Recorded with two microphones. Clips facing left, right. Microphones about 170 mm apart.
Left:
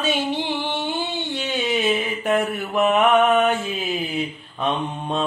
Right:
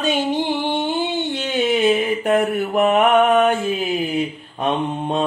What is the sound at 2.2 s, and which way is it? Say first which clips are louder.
Mantra: right 4 dB; 45° right (ahead or behind).